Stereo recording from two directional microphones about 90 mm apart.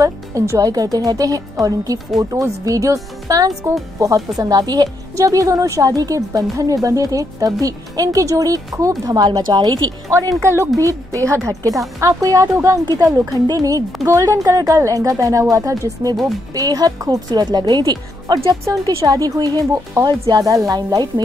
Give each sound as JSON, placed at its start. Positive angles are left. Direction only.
{"t": 0.0, "sound": "a woman's voice", "side_deg": -35}
{"t": 10.0, "sound": "speech", "side_deg": -35}
{"t": 12.8, "sound": "a woman's voice", "side_deg": -45}